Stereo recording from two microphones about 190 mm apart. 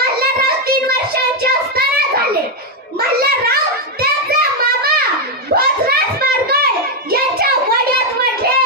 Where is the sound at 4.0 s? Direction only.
55° right (ahead or behind).